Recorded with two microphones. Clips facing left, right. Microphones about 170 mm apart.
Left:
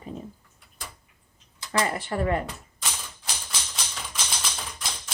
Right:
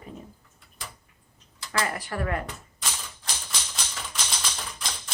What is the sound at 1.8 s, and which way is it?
Speech, 25° left (ahead or behind).